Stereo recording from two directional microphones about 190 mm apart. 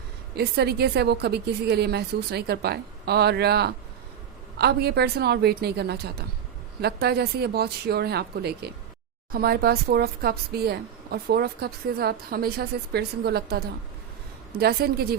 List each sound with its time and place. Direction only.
0.3 s speech: 60° right (ahead or behind)